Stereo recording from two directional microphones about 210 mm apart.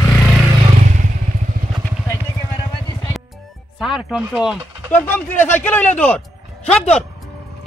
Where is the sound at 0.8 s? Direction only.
35° right (ahead or behind).